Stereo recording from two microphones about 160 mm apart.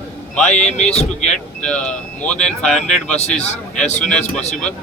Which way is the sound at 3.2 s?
45° left (ahead or behind).